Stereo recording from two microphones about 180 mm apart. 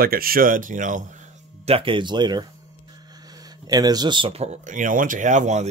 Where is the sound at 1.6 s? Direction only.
30° right (ahead or behind).